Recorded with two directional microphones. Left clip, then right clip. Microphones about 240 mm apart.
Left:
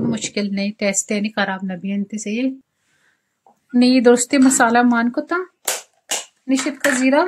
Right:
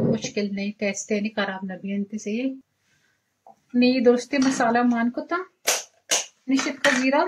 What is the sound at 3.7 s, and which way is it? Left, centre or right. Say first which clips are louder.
A woman's voice: left 5 dB; left.